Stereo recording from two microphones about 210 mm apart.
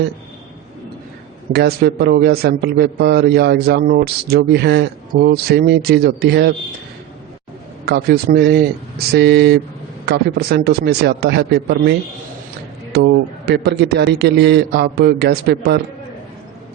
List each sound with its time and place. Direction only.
1.5 s a man's voice: 50° right (ahead or behind)
7.9 s a man's voice: 45° right (ahead or behind)